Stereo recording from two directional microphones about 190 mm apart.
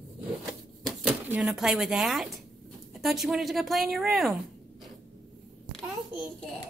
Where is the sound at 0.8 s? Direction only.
5° right (ahead or behind).